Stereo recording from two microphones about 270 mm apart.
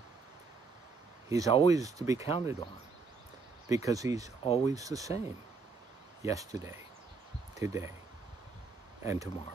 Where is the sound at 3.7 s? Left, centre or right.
Centre.